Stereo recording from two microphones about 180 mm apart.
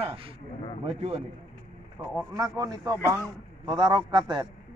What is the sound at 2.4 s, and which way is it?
A man's voice, 20° right (ahead or behind).